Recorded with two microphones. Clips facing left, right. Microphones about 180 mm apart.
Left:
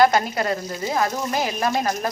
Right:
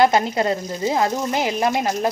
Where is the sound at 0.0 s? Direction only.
25° right (ahead or behind).